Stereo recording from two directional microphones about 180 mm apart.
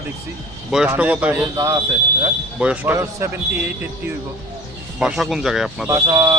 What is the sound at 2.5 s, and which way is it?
Speech, 10° right (ahead or behind).